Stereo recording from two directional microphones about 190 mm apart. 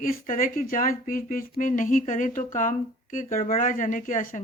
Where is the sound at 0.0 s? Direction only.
45° left (ahead or behind).